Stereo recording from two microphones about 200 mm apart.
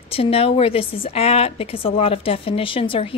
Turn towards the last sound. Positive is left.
turn(degrees=25)  # may be behind; listen again after turning